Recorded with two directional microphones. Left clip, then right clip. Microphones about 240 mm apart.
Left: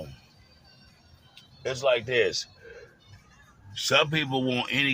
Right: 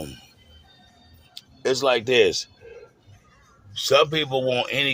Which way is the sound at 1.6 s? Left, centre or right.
Right.